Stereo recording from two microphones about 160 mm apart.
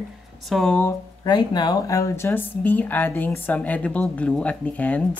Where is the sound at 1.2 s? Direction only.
25° left (ahead or behind).